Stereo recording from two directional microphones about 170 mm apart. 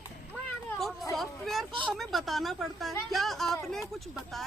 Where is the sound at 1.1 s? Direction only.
Centre (ahead or behind).